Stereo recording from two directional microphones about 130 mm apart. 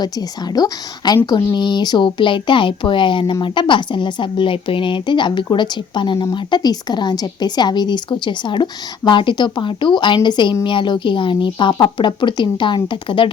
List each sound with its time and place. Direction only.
0.0 s speech: 30° left (ahead or behind)